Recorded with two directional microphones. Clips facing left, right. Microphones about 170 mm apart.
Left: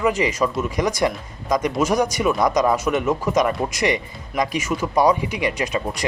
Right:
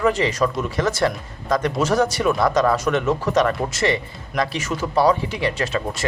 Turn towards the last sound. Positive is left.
turn(degrees=15)  # may be behind; listen again after turning